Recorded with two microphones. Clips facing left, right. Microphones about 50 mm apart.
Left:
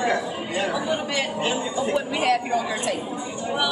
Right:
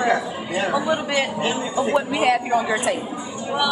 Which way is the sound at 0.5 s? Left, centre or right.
Centre.